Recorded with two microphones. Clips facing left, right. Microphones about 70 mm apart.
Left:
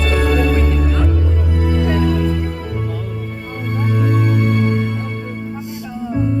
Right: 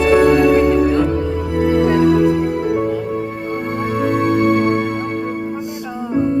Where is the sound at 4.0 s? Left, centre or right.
Right.